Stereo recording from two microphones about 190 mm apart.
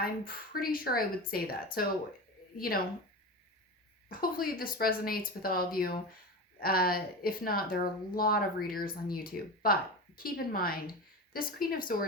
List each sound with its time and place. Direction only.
0.0 s speech: 50° left (ahead or behind)
4.1 s speech: 50° left (ahead or behind)